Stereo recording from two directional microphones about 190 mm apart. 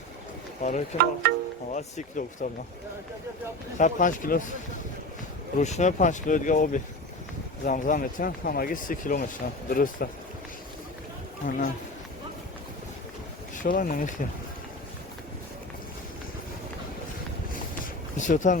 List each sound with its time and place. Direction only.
0.6 s speech: 40° left (ahead or behind)
1.2 s wind chime: 60° right (ahead or behind)
1.7 s speech: 40° left (ahead or behind)
3.8 s speech: 40° left (ahead or behind)
5.5 s speech: 40° left (ahead or behind)
11.4 s speech: 45° left (ahead or behind)
13.6 s speech: 45° left (ahead or behind)
18.2 s speech: 40° left (ahead or behind)